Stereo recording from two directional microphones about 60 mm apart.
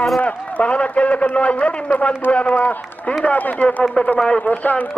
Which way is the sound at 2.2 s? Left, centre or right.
Left.